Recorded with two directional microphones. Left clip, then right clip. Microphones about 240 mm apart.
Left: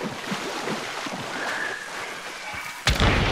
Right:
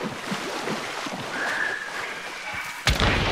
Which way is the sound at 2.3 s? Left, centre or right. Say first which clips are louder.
Right 1 dB; left.